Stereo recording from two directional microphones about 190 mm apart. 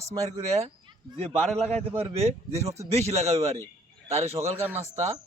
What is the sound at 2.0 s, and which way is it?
Speech, 35° right (ahead or behind).